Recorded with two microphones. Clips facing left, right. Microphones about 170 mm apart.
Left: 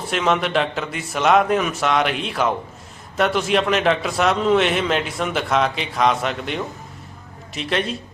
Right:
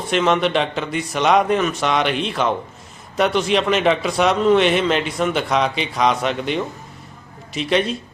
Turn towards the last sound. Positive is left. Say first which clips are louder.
# right 4 dB
turn(degrees=0)  # may be behind; listen again after turning